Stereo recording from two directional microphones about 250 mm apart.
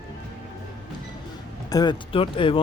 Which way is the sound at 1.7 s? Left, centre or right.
Centre.